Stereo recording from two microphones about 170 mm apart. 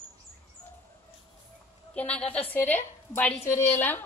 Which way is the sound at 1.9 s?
5° left (ahead or behind).